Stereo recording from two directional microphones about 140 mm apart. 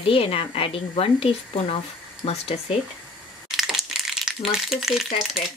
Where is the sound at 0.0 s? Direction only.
40° left (ahead or behind).